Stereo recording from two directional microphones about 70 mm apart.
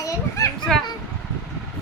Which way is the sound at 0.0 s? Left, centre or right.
Left.